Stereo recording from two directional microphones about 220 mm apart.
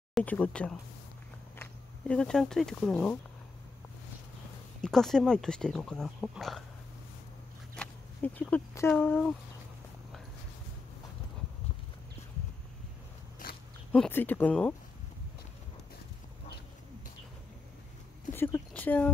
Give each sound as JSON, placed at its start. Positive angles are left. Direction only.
{"t": 0.1, "sound": "speech", "side_deg": 5}
{"t": 4.8, "sound": "speech", "side_deg": 0}
{"t": 7.7, "sound": "speech", "side_deg": 5}
{"t": 13.4, "sound": "dog", "side_deg": 40}
{"t": 13.9, "sound": "speech", "side_deg": 5}
{"t": 18.3, "sound": "speech", "side_deg": 10}